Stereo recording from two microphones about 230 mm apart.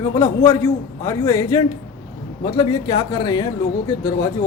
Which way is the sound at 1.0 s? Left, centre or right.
Centre.